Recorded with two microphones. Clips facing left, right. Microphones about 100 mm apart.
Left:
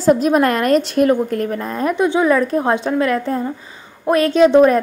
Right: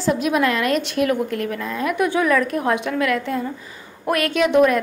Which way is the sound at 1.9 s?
25° left (ahead or behind).